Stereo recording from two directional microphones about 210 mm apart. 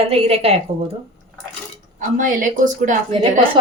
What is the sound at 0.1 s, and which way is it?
Speech, 30° right (ahead or behind).